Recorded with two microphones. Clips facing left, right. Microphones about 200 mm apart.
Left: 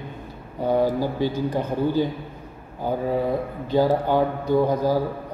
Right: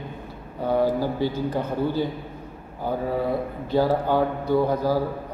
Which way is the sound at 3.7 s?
15° left (ahead or behind).